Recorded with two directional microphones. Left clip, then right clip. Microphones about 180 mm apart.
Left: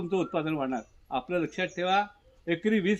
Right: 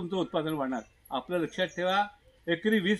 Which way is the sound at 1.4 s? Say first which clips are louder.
Even; 45° left (ahead or behind).